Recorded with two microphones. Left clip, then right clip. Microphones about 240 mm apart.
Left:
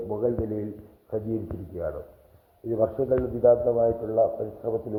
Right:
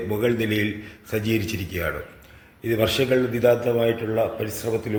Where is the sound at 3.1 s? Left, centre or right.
Right.